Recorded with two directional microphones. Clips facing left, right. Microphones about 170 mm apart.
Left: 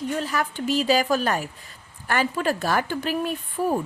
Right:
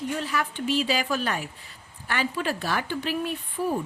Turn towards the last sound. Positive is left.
turn(degrees=45)  # may be behind; listen again after turning